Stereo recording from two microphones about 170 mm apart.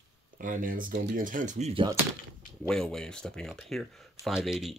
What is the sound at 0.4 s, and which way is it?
Speech, 50° right (ahead or behind).